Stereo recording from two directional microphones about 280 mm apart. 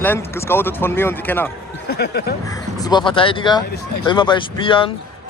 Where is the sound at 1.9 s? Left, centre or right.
Left.